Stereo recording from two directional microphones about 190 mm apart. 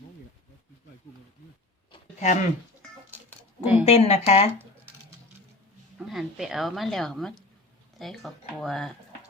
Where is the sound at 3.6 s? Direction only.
10° right (ahead or behind).